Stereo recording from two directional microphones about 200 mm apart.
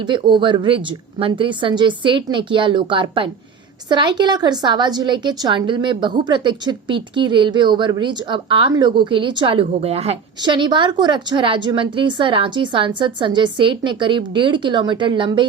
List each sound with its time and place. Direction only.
0.0 s a woman's voice: 25° right (ahead or behind)